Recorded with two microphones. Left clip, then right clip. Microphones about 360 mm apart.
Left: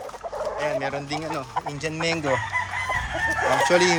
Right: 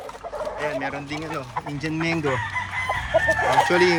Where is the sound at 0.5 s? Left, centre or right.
Centre.